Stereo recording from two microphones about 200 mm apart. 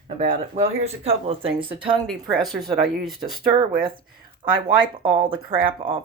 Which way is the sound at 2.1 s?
Centre (ahead or behind).